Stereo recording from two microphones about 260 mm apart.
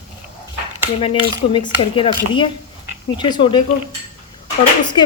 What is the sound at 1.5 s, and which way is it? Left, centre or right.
Speech, centre.